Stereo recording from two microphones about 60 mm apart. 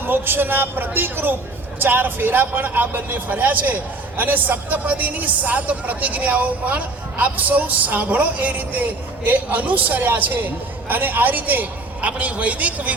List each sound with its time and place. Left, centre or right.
0.0 s a man's voice: right